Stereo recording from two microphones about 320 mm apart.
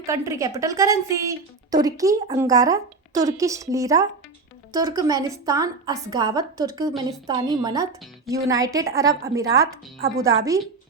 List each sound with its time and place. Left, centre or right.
0.0 s a woman's voice: centre